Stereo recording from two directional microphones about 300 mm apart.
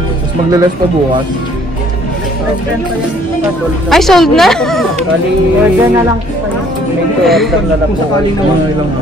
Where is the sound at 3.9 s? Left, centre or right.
Centre.